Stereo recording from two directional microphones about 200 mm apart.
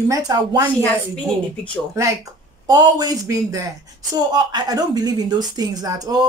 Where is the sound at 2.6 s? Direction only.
20° right (ahead or behind).